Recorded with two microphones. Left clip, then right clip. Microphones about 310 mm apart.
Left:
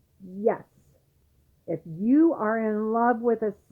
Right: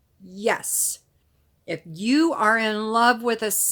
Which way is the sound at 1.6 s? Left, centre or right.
Right.